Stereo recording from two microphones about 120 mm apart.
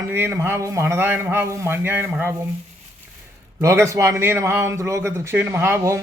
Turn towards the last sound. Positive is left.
turn(degrees=-25)  # may be behind; listen again after turning